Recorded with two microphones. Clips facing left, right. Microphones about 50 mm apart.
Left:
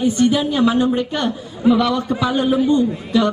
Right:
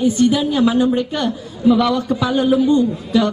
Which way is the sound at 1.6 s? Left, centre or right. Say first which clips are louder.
Right 1 dB; left.